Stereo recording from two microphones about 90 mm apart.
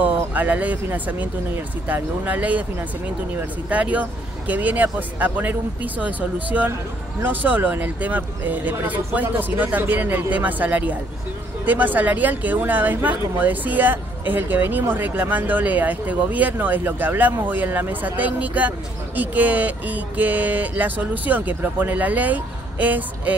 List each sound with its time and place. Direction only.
0.0 s speech: 20° right (ahead or behind)
3.6 s speech: 15° right (ahead or behind)